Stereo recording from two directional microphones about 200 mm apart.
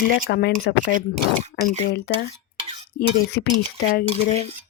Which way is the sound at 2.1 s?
55° left (ahead or behind).